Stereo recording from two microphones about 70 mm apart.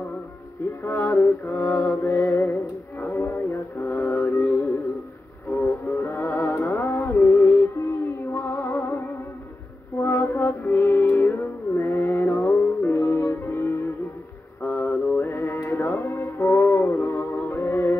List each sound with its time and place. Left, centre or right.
0.8 s music: left
1.2 s mantra: left
1.7 s mantra: left
3.0 s music: left
9.9 s mantra: left
10.4 s music: left
15.1 s music: left